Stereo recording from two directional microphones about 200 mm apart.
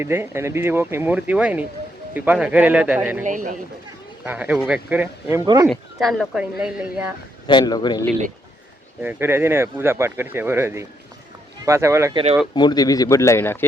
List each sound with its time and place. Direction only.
0.0 s speech: 10° right (ahead or behind)
3.2 s speech: 40° right (ahead or behind)
4.2 s speech: 5° right (ahead or behind)
7.4 s speech: 20° left (ahead or behind)
9.0 s speech: 10° right (ahead or behind)
12.1 s speech: 30° right (ahead or behind)
12.5 s speech: 20° left (ahead or behind)